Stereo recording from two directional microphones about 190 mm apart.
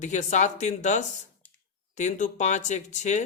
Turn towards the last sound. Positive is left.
turn(degrees=40)  # may be behind; listen again after turning